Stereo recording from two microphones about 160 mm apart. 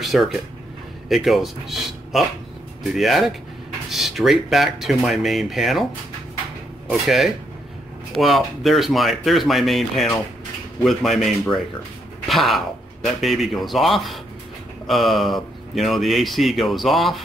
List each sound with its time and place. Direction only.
0.0 s a man's voice: centre (ahead or behind)
6.9 s speech: centre (ahead or behind)